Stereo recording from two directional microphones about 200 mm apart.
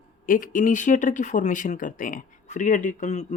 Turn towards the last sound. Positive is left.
turn(degrees=35)  # may be behind; listen again after turning